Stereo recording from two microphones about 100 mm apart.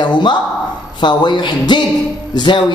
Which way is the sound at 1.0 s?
50° left (ahead or behind).